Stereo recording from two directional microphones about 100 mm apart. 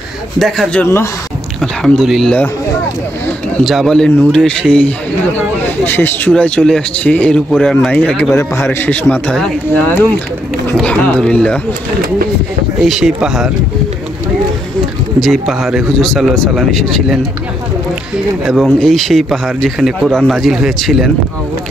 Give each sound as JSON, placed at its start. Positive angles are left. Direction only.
{"t": 0.4, "sound": "speech", "side_deg": 0}
{"t": 3.6, "sound": "a man's voice", "side_deg": 0}
{"t": 8.4, "sound": "a man's voice", "side_deg": 20}
{"t": 10.8, "sound": "a man's voice", "side_deg": 10}
{"t": 12.8, "sound": "speech", "side_deg": -5}
{"t": 15.1, "sound": "speech", "side_deg": 0}
{"t": 18.5, "sound": "speech", "side_deg": 5}